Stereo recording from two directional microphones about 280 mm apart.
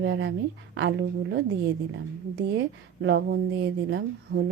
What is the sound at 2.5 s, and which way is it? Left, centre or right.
A woman's voice, right.